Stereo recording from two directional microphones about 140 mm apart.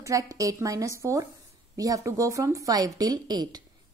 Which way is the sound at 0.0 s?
25° right (ahead or behind).